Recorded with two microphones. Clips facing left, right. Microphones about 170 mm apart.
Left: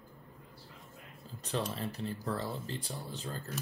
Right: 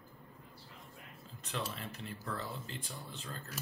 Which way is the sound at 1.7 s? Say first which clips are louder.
Left 7 dB; 35° left (ahead or behind).